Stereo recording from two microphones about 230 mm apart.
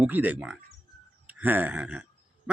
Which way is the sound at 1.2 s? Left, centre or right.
Centre.